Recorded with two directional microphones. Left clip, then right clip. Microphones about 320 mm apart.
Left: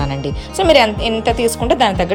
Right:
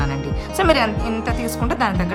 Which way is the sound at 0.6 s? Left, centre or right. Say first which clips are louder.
Left 6 dB; centre.